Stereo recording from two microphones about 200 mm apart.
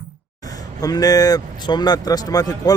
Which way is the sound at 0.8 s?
20° left (ahead or behind).